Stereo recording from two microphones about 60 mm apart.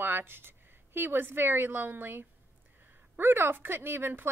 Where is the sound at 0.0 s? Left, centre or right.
Right.